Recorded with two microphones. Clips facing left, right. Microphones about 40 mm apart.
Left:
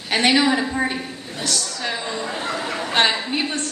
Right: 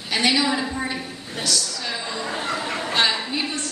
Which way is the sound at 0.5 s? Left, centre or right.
Left.